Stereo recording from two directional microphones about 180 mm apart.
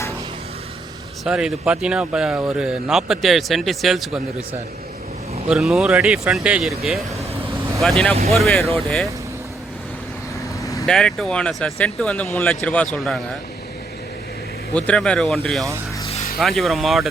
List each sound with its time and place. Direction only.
1.2 s speech: 5° right (ahead or behind)
5.5 s speech: centre (ahead or behind)
10.6 s vehicle: 15° left (ahead or behind)
10.8 s speech: centre (ahead or behind)
14.7 s speech: 5° left (ahead or behind)